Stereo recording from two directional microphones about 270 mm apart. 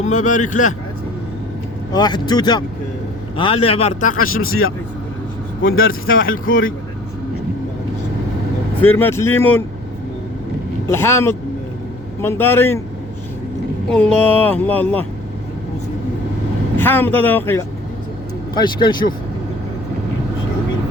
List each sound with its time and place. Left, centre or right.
0.0 s speech: left
1.9 s speech: centre
4.1 s speech: left
6.3 s speech: left
8.8 s speech: centre
10.8 s speech: centre
13.9 s speech: centre
16.7 s speech: centre